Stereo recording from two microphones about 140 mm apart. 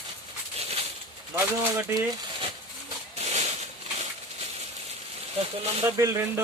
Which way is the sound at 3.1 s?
50° right (ahead or behind).